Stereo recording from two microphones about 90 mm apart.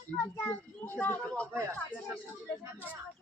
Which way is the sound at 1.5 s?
35° right (ahead or behind).